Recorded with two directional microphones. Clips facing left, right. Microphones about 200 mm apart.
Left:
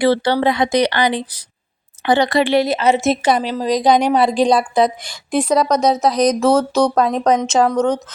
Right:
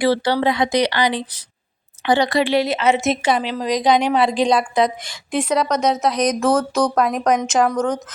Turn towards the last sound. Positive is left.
turn(degrees=30)  # may be behind; listen again after turning